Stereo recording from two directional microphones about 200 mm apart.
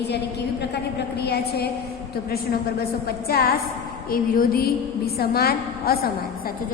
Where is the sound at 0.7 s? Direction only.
55° left (ahead or behind).